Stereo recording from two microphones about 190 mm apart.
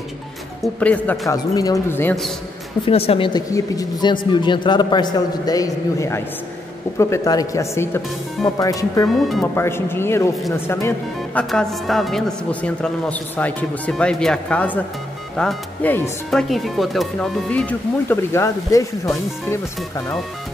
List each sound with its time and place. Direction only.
0.6 s speech: 5° left (ahead or behind)
2.8 s a man's voice: 30° left (ahead or behind)
9.0 s speech: centre (ahead or behind)
9.6 s speech: 10° left (ahead or behind)